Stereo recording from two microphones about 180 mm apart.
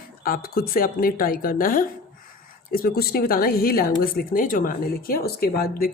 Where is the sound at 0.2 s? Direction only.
55° left (ahead or behind).